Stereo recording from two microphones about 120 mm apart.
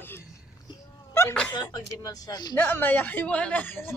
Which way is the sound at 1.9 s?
30° left (ahead or behind).